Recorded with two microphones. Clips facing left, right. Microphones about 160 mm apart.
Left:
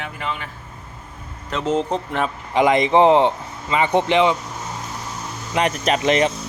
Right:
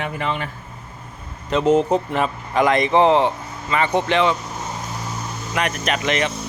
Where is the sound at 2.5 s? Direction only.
20° left (ahead or behind).